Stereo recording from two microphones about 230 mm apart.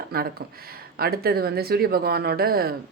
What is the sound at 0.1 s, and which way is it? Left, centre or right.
Speech, right.